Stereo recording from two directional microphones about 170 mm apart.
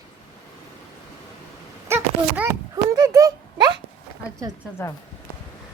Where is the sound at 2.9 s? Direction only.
20° right (ahead or behind).